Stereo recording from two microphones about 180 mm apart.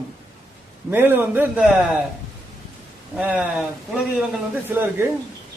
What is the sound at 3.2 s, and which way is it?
Speech, 5° right (ahead or behind).